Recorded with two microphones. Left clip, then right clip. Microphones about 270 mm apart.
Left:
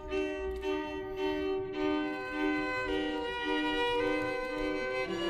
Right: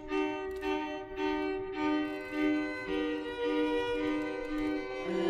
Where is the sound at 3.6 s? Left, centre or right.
Left.